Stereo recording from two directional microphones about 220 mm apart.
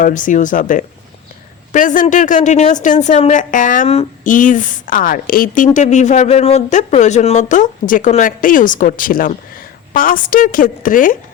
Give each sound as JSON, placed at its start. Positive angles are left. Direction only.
{"t": 0.0, "sound": "a woman's voice", "side_deg": 35}